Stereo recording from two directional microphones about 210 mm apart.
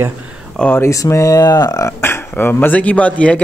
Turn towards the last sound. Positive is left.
turn(degrees=5)  # may be behind; listen again after turning